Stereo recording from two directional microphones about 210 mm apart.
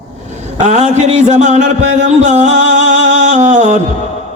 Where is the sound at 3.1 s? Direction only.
35° right (ahead or behind).